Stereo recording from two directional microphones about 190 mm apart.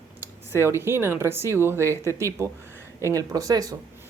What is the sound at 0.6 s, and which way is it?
A woman's voice, 10° right (ahead or behind).